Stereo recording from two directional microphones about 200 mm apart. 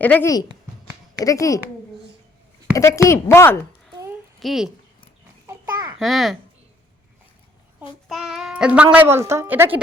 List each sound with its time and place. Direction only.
0.0 s speech: 10° left (ahead or behind)
2.7 s a woman's voice: 15° left (ahead or behind)
4.4 s a child's voice: centre (ahead or behind)
5.5 s babbling: 15° right (ahead or behind)
6.0 s a child's voice: centre (ahead or behind)
7.8 s a child's voice: centre (ahead or behind)